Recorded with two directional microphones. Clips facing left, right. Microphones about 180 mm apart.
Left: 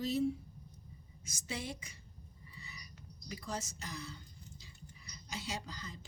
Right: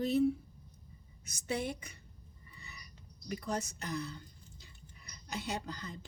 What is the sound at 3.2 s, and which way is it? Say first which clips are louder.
Speech: right 5 dB; 55° right (ahead or behind).